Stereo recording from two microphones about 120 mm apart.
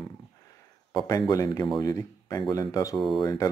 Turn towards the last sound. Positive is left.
turn(degrees=35)  # may be behind; listen again after turning